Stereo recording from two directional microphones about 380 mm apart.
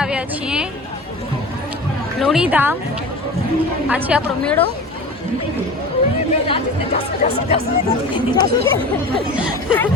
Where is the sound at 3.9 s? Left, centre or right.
Centre.